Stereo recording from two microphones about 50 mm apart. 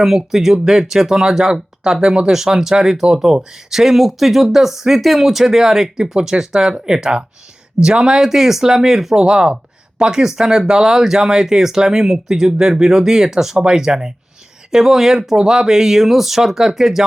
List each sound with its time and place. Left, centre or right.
0.0 s speech: centre
9.2 s speech: centre